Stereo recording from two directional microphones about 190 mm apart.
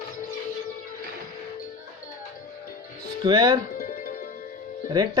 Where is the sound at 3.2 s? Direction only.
20° right (ahead or behind).